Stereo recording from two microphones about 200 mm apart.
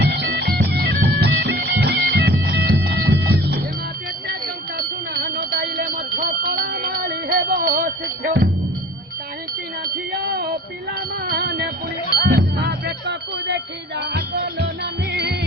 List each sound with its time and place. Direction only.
0.0 s bagpipes: 55° right (ahead or behind)
4.8 s a sound: 50° right (ahead or behind)
11.3 s music: 50° right (ahead or behind)